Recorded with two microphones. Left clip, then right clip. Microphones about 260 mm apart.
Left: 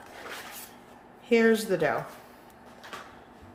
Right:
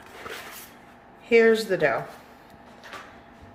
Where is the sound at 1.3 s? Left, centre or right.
Centre.